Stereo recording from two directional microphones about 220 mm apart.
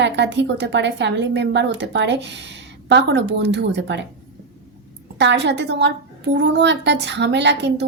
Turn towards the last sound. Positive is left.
turn(degrees=-50)  # may be behind; listen again after turning